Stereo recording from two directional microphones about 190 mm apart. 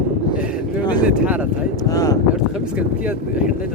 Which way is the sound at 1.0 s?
5° right (ahead or behind).